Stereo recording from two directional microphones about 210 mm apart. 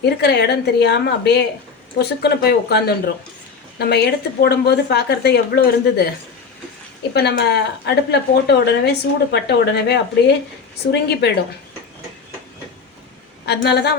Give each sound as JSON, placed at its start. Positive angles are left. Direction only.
{"t": 0.0, "sound": "speech", "side_deg": 50}
{"t": 7.1, "sound": "speech", "side_deg": 50}
{"t": 13.4, "sound": "speech", "side_deg": 50}